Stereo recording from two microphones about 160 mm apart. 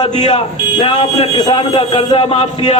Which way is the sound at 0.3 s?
40° left (ahead or behind).